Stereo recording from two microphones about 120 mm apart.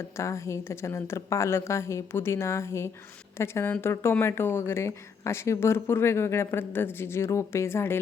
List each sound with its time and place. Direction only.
0.2 s speech: 25° left (ahead or behind)